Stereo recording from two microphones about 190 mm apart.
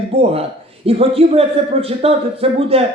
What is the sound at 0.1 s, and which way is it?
Speech, 30° right (ahead or behind).